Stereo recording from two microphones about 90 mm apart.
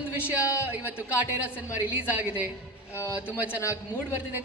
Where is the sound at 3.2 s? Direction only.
20° right (ahead or behind).